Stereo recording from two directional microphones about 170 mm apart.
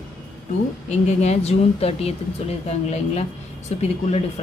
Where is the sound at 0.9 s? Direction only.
40° left (ahead or behind).